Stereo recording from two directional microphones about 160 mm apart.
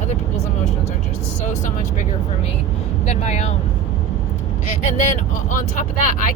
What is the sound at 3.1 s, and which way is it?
Speech, 45° left (ahead or behind).